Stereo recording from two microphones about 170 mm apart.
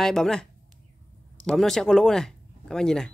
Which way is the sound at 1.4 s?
Centre (ahead or behind).